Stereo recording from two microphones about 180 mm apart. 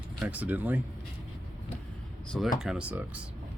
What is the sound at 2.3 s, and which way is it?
Speech, centre (ahead or behind).